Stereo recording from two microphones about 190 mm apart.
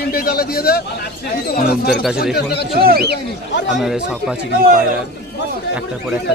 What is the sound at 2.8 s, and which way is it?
Speech, 55° right (ahead or behind).